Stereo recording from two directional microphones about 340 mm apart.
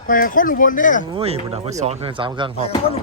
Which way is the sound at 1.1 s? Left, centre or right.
Centre.